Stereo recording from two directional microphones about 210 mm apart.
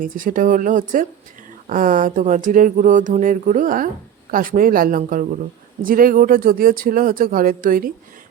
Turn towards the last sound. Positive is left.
turn(degrees=-40)  # may be behind; listen again after turning